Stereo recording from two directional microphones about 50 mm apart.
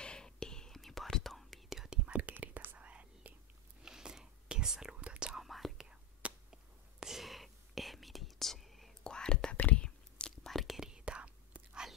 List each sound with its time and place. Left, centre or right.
0.0 s whispering: centre
1.7 s whispering: centre
2.3 s whispering: right
3.8 s whispering: centre
5.4 s whispering: centre
5.9 s whispering: centre
9.0 s whispering: centre
10.5 s whispering: centre
10.8 s whispering: centre